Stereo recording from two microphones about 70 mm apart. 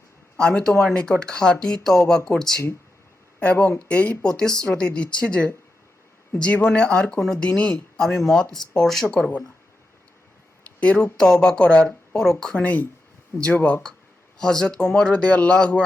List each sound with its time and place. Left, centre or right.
0.3 s speech: centre
3.4 s speech: centre
10.8 s speech: centre
14.3 s speech: centre